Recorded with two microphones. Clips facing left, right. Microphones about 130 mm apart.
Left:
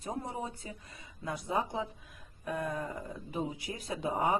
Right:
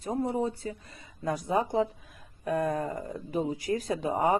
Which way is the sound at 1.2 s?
45° right (ahead or behind).